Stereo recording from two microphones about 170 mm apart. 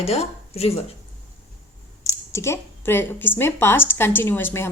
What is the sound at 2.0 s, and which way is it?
Speech, 15° left (ahead or behind).